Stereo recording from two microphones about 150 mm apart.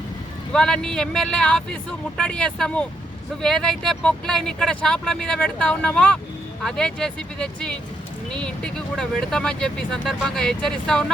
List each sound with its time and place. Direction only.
0.5 s speech: 5° left (ahead or behind)